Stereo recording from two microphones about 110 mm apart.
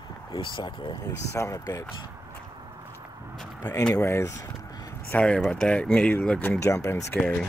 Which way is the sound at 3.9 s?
25° left (ahead or behind).